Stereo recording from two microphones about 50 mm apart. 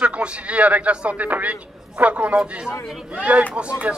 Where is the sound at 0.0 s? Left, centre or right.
Right.